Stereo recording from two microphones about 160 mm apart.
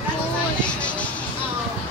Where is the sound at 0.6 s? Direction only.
10° left (ahead or behind).